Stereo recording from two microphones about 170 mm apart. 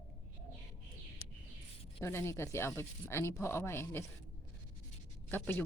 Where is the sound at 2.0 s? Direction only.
15° left (ahead or behind).